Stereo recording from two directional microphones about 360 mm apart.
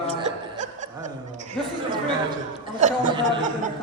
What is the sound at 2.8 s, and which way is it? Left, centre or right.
Speech, right.